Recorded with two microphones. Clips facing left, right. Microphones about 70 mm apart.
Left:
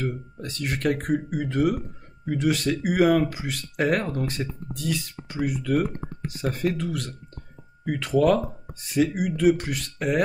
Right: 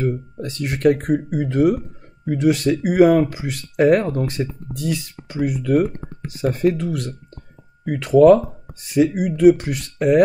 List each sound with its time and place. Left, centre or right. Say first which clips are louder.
0.0 s speech: right 7 dB; right